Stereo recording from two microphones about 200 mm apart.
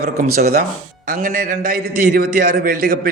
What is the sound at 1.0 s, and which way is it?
A man's voice, 45° right (ahead or behind).